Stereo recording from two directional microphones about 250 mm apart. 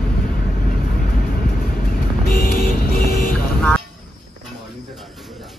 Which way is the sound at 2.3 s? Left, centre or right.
Left.